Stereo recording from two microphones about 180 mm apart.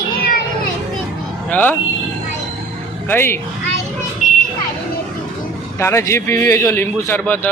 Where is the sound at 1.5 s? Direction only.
10° left (ahead or behind).